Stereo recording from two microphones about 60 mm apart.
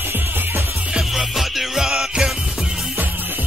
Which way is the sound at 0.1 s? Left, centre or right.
Right.